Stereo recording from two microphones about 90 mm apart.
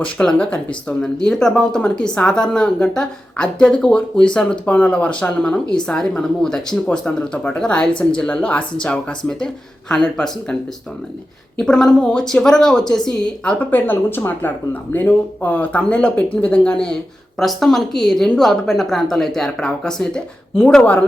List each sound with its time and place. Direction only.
0.0 s speech: 10° left (ahead or behind)
11.6 s speech: 5° left (ahead or behind)